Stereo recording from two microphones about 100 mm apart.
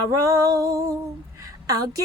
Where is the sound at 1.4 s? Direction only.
35° right (ahead or behind).